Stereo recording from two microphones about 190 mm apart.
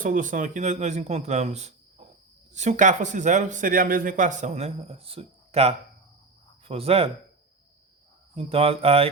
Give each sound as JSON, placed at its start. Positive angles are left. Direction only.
{"t": 0.0, "sound": "speech", "side_deg": -45}
{"t": 8.4, "sound": "speech", "side_deg": -30}